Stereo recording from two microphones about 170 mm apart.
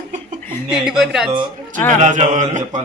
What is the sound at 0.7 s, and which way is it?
Speech, 5° right (ahead or behind).